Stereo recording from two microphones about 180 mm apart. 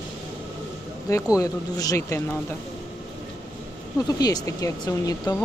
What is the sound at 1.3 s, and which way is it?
Speech, 20° left (ahead or behind).